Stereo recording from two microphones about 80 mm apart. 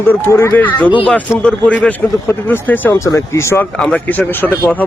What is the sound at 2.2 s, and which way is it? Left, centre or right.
Speech, left.